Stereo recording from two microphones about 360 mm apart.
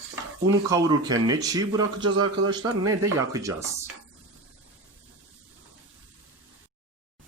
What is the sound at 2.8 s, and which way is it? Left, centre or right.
Speech, centre.